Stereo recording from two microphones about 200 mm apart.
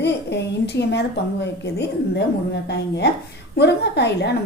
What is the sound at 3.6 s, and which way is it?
Speech, 55° left (ahead or behind).